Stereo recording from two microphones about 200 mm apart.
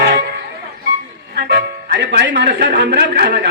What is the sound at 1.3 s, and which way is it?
A man's voice, 60° right (ahead or behind).